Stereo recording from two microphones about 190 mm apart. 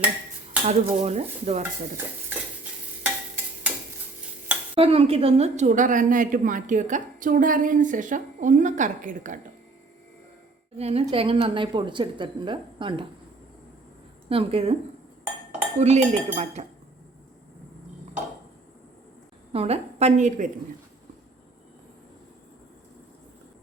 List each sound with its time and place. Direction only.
0.6 s dishes: 35° right (ahead or behind)
3.0 s stir: 10° right (ahead or behind)
4.7 s a woman's voice: 30° right (ahead or behind)
10.8 s dishes: 35° right (ahead or behind)
11.1 s a woman's voice: 30° right (ahead or behind)
14.3 s dishes: 30° right (ahead or behind)
15.8 s dishes: 35° right (ahead or behind)
19.5 s dishes: 35° right (ahead or behind)